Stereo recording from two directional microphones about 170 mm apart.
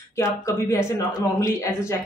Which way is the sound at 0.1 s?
20° left (ahead or behind).